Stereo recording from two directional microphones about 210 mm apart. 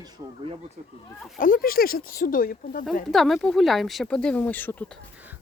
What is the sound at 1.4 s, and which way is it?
Speech, 40° left (ahead or behind).